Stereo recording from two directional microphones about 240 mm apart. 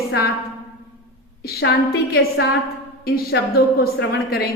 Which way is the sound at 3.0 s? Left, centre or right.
Left.